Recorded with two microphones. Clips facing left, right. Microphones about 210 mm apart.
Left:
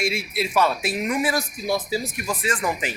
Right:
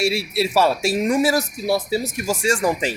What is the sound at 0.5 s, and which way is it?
Speech, 30° right (ahead or behind).